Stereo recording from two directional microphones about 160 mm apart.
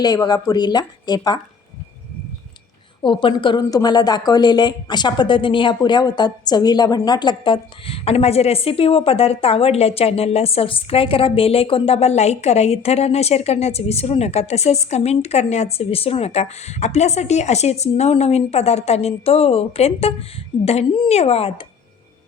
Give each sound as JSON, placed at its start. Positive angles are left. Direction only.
{"t": 0.0, "sound": "a woman's voice", "side_deg": 25}
{"t": 3.0, "sound": "a woman's voice", "side_deg": 30}